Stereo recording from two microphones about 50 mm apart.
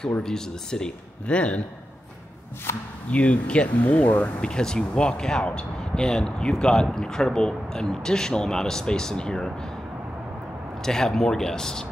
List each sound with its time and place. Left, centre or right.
0.2 s speech: centre
3.1 s speech: left
4.4 s speech: centre
10.9 s speech: centre